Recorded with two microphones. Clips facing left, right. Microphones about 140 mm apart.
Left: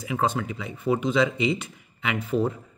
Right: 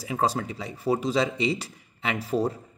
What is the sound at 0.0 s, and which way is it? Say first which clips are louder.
Speech: even; 35° right (ahead or behind).